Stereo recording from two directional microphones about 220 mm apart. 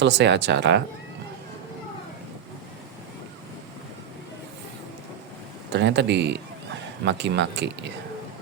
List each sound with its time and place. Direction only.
0.0 s speech: 50° right (ahead or behind)
5.7 s speech: 50° right (ahead or behind)